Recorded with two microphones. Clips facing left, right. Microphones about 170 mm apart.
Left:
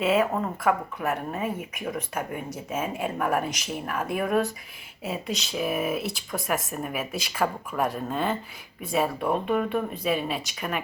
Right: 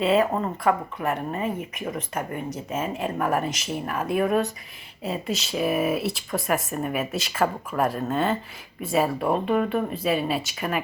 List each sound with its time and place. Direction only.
0.0 s speech: centre (ahead or behind)